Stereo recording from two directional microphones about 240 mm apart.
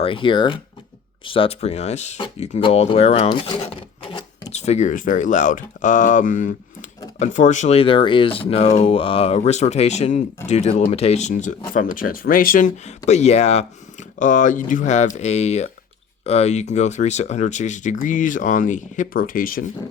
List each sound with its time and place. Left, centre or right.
0.0 s speech: left